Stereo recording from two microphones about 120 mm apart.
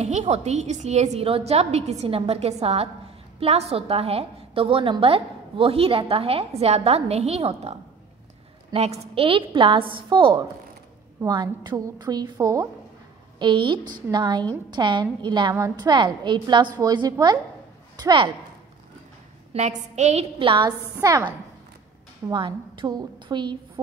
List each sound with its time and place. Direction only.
0.0 s a woman's voice: 65° right (ahead or behind)
8.7 s a woman's voice: 60° right (ahead or behind); by 12.6 s 30° right (ahead or behind)
13.4 s a woman's voice: 40° right (ahead or behind)
19.5 s a woman's voice: 70° right (ahead or behind); by 20.7 s 45° right (ahead or behind)
22.3 s a woman's voice: 40° right (ahead or behind)